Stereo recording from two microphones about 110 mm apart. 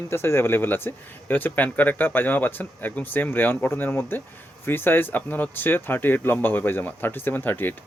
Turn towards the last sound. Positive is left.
turn(degrees=20)  # may be behind; listen again after turning